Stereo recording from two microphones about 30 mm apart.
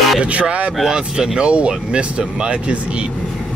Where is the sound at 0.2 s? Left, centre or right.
Right.